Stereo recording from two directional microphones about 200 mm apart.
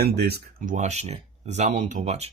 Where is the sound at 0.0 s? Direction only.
50° right (ahead or behind).